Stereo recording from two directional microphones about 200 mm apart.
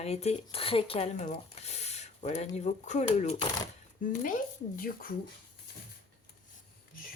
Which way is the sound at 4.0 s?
40° left (ahead or behind).